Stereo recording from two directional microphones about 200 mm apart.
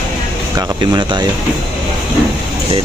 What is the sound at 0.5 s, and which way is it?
Speech, 20° right (ahead or behind).